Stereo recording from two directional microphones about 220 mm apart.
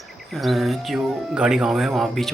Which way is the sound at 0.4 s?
Centre (ahead or behind).